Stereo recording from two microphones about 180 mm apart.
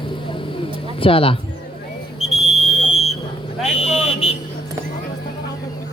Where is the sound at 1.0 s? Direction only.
30° left (ahead or behind).